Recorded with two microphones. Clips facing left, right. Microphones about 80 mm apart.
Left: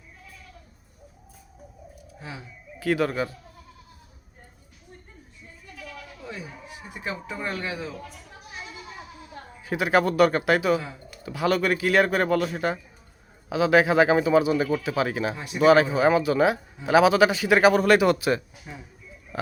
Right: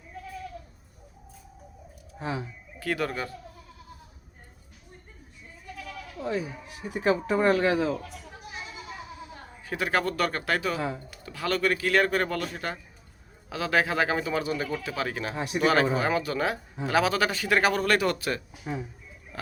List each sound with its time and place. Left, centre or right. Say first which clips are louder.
2.7 s speech: left 5 dB; centre
6.2 s speech: right 9 dB; right
9.6 s speech: left 5 dB; centre
10.8 s speech: right 3 dB; right
11.3 s speech: left 4 dB; centre